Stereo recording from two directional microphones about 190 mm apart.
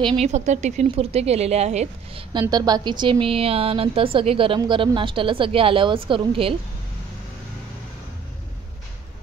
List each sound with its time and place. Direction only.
0.0 s speech: 30° right (ahead or behind)
2.4 s a woman's voice: 20° right (ahead or behind)